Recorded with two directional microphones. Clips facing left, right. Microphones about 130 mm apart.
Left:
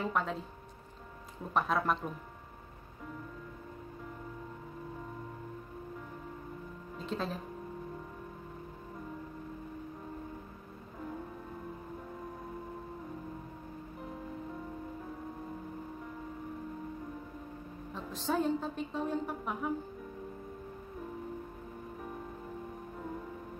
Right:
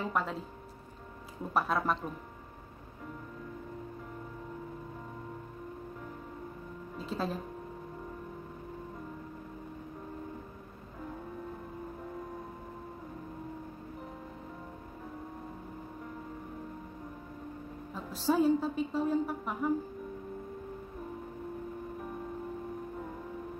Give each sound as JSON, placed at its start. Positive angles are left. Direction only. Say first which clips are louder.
{"t": 0.0, "sound": "a woman's voice", "louder": "even", "side_deg": 0}
{"t": 1.5, "sound": "a woman's voice", "louder": "even", "side_deg": -5}
{"t": 7.0, "sound": "a woman's voice", "louder": "right 1 dB", "side_deg": -5}
{"t": 17.9, "sound": "a woman's voice", "louder": "right 4 dB", "side_deg": -5}